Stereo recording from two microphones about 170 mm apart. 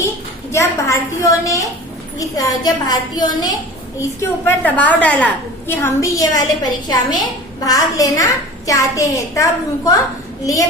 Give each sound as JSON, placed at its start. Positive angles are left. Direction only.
{"t": 0.5, "sound": "a woman's voice", "side_deg": 15}
{"t": 4.2, "sound": "a woman's voice", "side_deg": 10}